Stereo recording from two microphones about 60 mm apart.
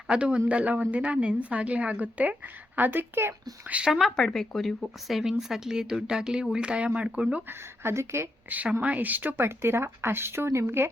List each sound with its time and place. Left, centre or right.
0.1 s a woman's voice: centre; by 3.3 s right
3.7 s a woman's voice: right
4.2 s speech: centre
7.9 s speech: right
8.4 s a woman's voice: right
9.5 s speech: right